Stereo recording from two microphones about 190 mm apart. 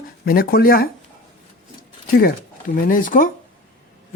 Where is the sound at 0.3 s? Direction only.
50° left (ahead or behind).